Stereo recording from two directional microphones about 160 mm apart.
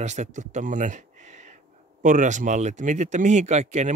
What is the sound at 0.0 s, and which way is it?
Speech, 45° right (ahead or behind).